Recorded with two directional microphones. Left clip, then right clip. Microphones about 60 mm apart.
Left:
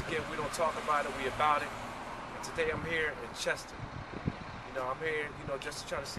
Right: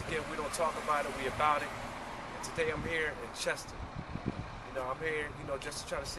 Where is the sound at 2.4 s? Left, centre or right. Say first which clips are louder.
Left 1 dB; centre.